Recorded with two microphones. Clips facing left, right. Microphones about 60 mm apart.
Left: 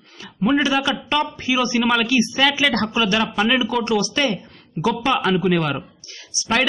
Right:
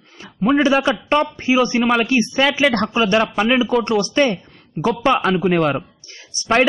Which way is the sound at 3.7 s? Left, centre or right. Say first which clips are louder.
Right 3 dB; right.